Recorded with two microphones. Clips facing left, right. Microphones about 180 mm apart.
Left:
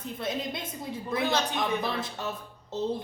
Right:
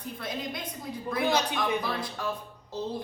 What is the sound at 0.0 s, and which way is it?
Speech, 25° left (ahead or behind).